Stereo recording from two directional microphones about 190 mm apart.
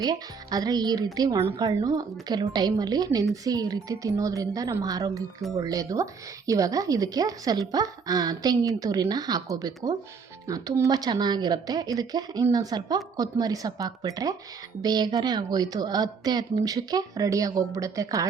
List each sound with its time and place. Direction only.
0.0 s speech: 20° right (ahead or behind)